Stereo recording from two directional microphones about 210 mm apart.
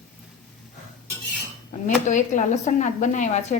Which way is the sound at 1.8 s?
35° left (ahead or behind).